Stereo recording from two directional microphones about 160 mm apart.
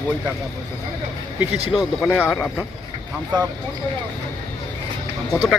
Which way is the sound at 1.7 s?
Centre (ahead or behind).